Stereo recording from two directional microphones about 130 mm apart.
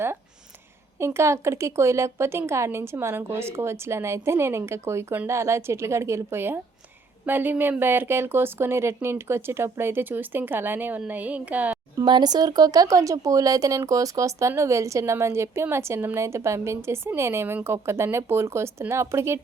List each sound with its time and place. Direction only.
0.9 s a woman's voice: 20° right (ahead or behind)
11.9 s speech: 35° right (ahead or behind)